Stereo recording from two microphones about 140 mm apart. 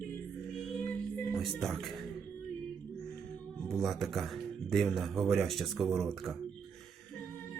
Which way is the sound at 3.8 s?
Centre (ahead or behind).